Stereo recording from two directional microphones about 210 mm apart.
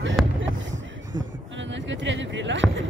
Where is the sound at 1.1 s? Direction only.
60° right (ahead or behind).